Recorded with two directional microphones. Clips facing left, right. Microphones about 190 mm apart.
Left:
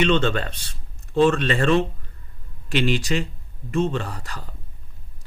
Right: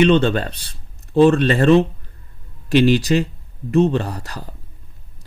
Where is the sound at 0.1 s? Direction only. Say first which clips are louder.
Right 5 dB; 35° right (ahead or behind).